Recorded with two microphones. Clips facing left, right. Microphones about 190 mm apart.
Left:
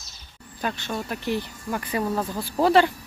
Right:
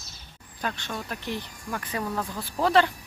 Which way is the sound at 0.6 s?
5° left (ahead or behind).